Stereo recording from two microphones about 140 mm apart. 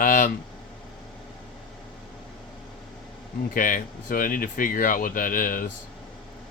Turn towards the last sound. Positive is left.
turn(degrees=75)  # may be behind; listen again after turning